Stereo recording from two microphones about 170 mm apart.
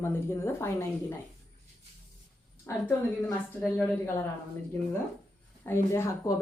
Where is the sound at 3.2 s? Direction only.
10° left (ahead or behind).